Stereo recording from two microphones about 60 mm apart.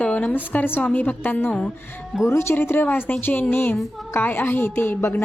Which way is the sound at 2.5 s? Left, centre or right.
Left.